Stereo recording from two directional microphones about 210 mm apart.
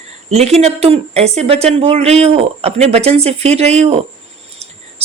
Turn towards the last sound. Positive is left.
turn(degrees=-30)  # may be behind; listen again after turning